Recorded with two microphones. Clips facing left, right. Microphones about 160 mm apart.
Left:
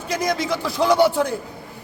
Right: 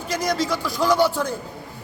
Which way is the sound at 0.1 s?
55° left (ahead or behind).